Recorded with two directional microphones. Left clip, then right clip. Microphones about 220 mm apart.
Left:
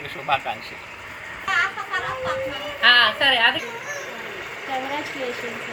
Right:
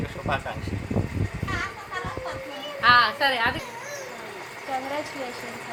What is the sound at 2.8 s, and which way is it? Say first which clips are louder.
Speech: left 3 dB; 15° right (ahead or behind).